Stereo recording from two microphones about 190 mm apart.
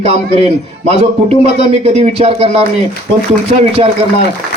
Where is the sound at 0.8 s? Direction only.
35° right (ahead or behind).